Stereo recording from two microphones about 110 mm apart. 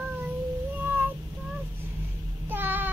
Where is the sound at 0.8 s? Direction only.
15° right (ahead or behind).